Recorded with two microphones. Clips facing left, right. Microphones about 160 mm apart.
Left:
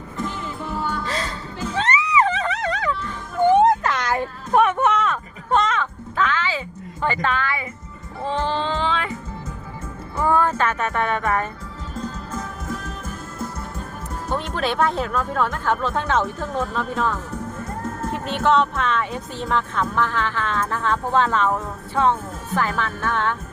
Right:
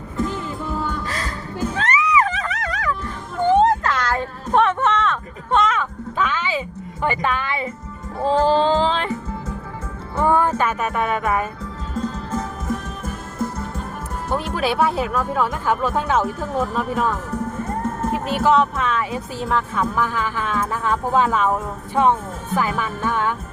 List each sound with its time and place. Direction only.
1.0 s music: 25° left (ahead or behind)
3.4 s a sound: 15° left (ahead or behind); by 6.6 s 15° right (ahead or behind)
7.0 s speech: 15° right (ahead or behind)
8.2 s music: 35° right (ahead or behind)
10.2 s speech: 15° right (ahead or behind)
14.3 s speech: 5° right (ahead or behind)